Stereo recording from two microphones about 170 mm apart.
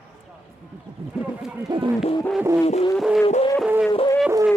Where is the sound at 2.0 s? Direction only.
35° left (ahead or behind).